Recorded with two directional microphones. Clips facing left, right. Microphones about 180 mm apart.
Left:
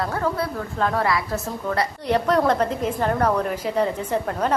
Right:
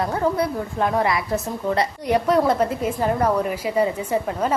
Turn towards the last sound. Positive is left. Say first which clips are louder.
# right 1 dB
turn(degrees=-5)  # may be behind; listen again after turning